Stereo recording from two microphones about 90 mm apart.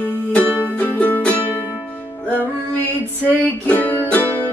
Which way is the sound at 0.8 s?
20° left (ahead or behind).